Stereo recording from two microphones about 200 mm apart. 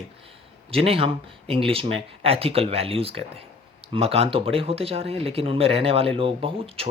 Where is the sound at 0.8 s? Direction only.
30° right (ahead or behind).